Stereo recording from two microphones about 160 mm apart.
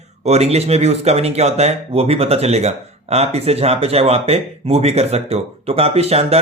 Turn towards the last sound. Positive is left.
turn(degrees=-40)  # may be behind; listen again after turning